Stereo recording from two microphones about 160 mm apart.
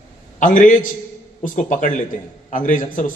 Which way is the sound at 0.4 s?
55° left (ahead or behind).